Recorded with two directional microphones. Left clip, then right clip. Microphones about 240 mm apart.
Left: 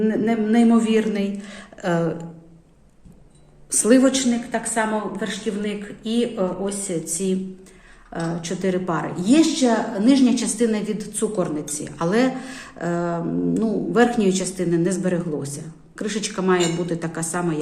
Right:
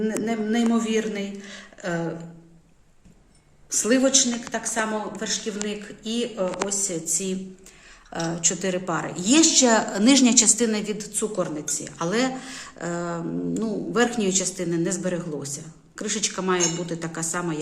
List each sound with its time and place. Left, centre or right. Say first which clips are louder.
0.0 s speech: left 5 dB; centre
3.7 s speech: left 4 dB; centre
8.1 s a woman's voice: right 1 dB; centre
9.6 s a woman's voice: right 1 dB; right; by 17.6 s centre